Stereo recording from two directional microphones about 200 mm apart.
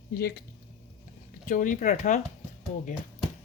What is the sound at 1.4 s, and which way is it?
Speech, 40° left (ahead or behind).